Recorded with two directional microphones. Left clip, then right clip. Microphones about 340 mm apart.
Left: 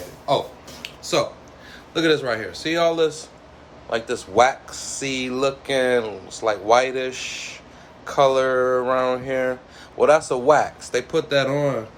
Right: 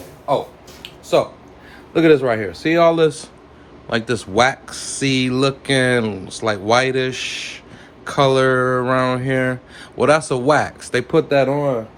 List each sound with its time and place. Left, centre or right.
0.3 s speech: centre